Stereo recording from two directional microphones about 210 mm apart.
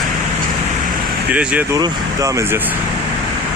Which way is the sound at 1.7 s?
15° right (ahead or behind).